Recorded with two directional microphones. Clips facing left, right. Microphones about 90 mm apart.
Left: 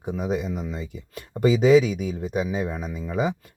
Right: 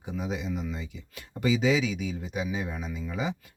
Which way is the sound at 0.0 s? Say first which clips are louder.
Left 6 dB; 45° left (ahead or behind).